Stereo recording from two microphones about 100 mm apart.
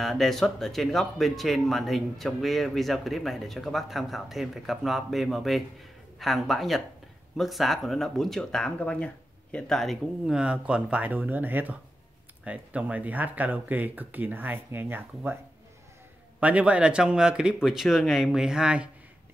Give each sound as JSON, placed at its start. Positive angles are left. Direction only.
{"t": 0.0, "sound": "speech", "side_deg": 5}
{"t": 16.3, "sound": "speech", "side_deg": -15}